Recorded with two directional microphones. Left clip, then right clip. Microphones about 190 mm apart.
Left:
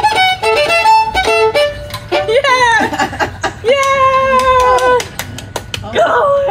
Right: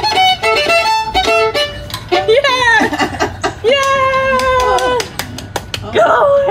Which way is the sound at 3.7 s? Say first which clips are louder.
Left 2 dB; 15° right (ahead or behind).